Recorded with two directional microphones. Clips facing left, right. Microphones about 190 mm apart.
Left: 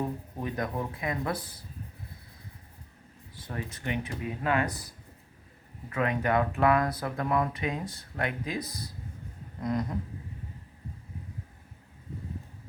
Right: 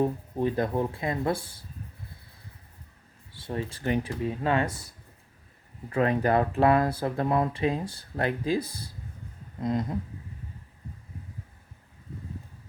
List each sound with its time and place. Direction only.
0.0 s speech: 30° right (ahead or behind)
3.3 s speech: 30° right (ahead or behind)
9.6 s a sound: 25° right (ahead or behind)